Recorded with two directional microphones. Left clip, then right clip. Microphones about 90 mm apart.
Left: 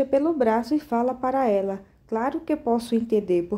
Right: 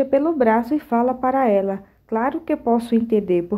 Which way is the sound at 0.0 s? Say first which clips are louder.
Right 4 dB; 30° right (ahead or behind).